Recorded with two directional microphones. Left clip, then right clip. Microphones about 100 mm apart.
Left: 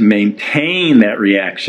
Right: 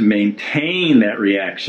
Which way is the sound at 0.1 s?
35° left (ahead or behind).